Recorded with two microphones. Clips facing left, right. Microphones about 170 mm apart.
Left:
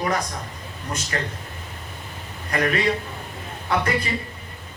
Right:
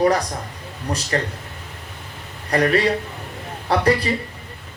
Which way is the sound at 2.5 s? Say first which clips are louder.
Right 4 dB; 35° right (ahead or behind).